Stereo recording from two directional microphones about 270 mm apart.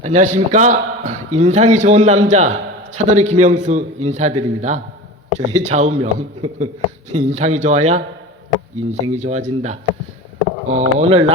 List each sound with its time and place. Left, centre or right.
0.0 s a man's voice: right